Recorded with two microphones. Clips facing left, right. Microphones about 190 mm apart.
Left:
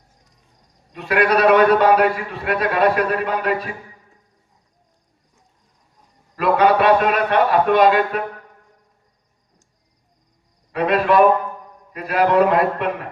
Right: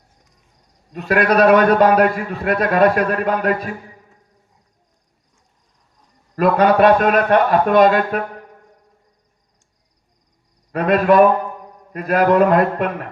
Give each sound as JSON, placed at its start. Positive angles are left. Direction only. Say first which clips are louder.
{"t": 0.9, "sound": "a man's voice", "louder": "right 2 dB", "side_deg": -45}
{"t": 6.3, "sound": "a man's voice", "louder": "right 2 dB", "side_deg": -45}
{"t": 10.7, "sound": "a man's voice", "louder": "right 3 dB", "side_deg": -45}